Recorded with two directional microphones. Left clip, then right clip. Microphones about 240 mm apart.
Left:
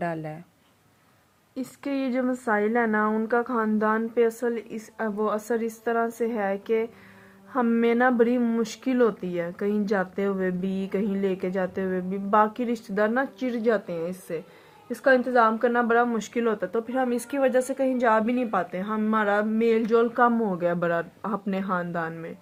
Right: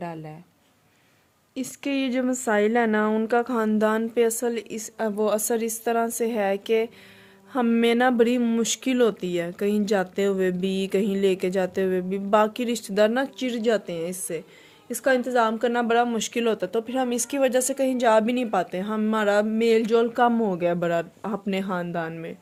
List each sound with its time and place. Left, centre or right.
0.0 s speech: centre
1.5 s a woman's voice: right